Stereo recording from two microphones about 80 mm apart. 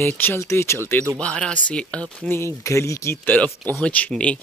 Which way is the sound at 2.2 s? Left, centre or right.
Left.